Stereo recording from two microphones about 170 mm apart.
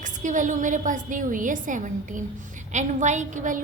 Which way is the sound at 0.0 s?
50° right (ahead or behind).